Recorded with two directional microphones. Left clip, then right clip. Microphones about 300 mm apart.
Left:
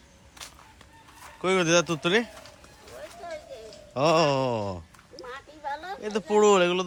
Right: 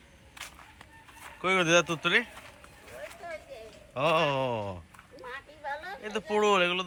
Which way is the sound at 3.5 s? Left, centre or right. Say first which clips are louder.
Left 3 dB; left.